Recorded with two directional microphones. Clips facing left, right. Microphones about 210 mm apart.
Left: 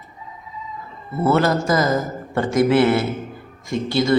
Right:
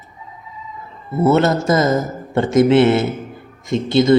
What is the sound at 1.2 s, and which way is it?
A man's voice, 20° right (ahead or behind).